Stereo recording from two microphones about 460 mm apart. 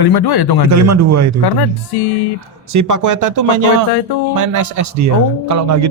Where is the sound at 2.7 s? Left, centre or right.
Right.